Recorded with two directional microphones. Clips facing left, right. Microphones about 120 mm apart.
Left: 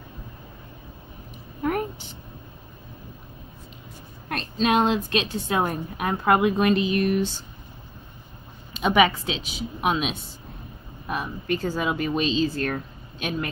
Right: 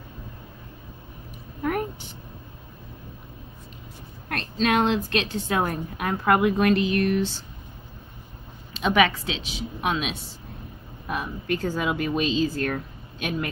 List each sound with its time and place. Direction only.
1.6 s a sound: centre (ahead or behind)
4.3 s a woman's voice: 5° left (ahead or behind)
8.8 s a woman's voice: 5° left (ahead or behind)
11.1 s a woman's voice: centre (ahead or behind)